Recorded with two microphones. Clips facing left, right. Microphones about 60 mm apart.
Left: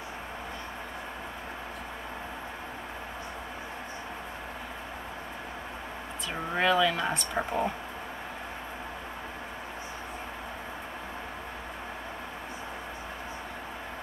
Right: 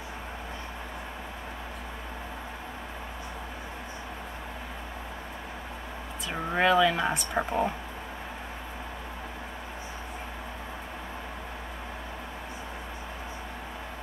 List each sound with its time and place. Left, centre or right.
6.3 s speech: centre